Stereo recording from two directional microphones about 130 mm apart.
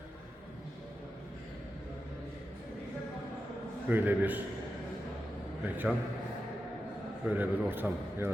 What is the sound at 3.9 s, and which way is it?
Speech, 15° right (ahead or behind).